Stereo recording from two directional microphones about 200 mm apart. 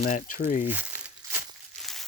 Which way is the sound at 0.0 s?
45° left (ahead or behind).